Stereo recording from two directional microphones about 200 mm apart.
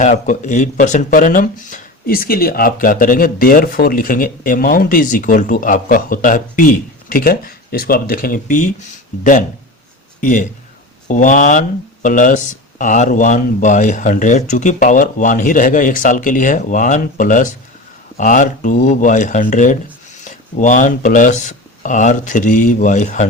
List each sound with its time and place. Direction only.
0.0 s speech: 35° left (ahead or behind)